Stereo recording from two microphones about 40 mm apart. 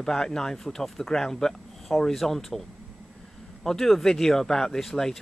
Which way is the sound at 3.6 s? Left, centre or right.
Centre.